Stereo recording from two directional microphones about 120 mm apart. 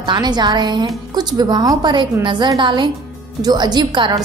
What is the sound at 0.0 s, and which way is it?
A woman's voice, 35° right (ahead or behind).